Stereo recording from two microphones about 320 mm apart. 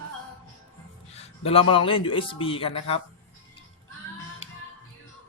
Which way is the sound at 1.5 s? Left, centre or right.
Centre.